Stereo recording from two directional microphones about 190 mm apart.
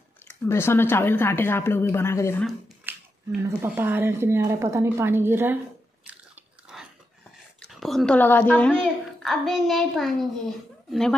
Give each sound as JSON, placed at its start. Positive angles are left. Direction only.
{"t": 0.5, "sound": "speech", "side_deg": 15}
{"t": 2.8, "sound": "speech", "side_deg": -10}
{"t": 7.6, "sound": "a child's voice", "side_deg": 0}